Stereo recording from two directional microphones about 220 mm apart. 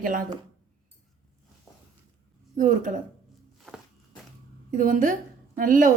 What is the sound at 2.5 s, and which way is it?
Speech, 35° right (ahead or behind).